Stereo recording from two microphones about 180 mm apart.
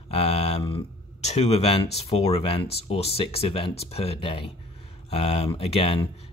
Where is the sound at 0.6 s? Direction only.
30° left (ahead or behind).